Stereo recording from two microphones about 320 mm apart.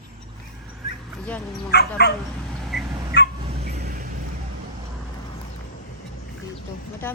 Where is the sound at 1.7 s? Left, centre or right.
Left.